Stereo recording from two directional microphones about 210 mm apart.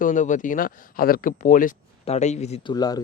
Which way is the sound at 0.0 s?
35° left (ahead or behind).